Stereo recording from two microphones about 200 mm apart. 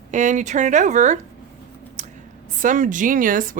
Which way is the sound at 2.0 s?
35° right (ahead or behind).